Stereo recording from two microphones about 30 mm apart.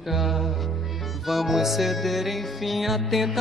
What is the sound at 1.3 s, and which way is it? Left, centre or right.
Music, centre.